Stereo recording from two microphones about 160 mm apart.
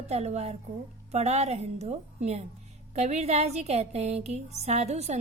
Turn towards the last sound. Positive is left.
turn(degrees=-45)  # may be behind; listen again after turning